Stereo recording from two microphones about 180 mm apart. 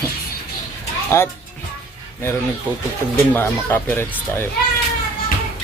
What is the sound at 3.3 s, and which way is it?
Speech, 10° left (ahead or behind).